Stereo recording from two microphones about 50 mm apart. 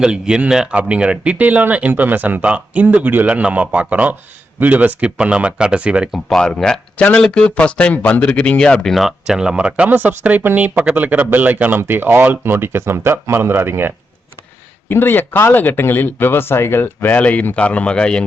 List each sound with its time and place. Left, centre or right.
0.0 s a man's voice: centre
6.2 s speech: centre
9.0 s a man's voice: centre; by 13.9 s right
14.8 s speech: left
17.2 s speech: left